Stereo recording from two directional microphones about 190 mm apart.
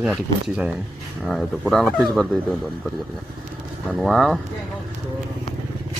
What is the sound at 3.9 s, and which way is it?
Speech, centre (ahead or behind).